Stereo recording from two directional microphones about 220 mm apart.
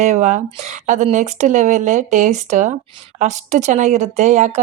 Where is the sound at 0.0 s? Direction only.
30° right (ahead or behind).